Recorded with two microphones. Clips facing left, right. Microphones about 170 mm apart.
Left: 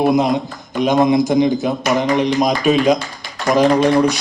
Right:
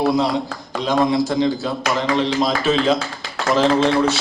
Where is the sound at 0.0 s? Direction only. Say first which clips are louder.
Left 3 dB; 20° left (ahead or behind).